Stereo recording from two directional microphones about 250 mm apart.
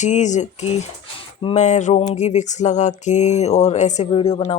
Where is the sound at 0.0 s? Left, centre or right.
Left.